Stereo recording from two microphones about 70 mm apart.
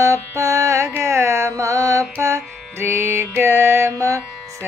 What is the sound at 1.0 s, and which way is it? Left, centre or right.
Music, right.